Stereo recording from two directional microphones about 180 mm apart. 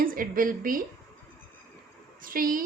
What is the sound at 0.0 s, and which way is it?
Speech, 50° right (ahead or behind).